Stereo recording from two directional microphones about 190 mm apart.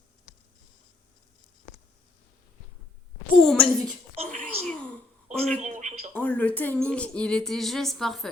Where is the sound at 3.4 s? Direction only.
Centre (ahead or behind).